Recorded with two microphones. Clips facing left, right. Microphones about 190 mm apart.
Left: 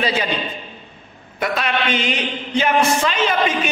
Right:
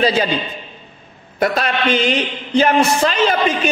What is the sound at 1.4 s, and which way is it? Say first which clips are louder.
A man's voice: right 4 dB; 40° right (ahead or behind).